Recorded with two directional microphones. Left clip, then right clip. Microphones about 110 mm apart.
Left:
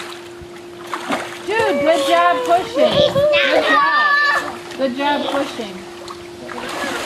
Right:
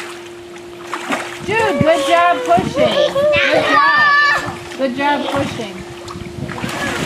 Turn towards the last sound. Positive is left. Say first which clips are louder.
# right 2 dB
turn(degrees=-5)  # may be behind; listen again after turning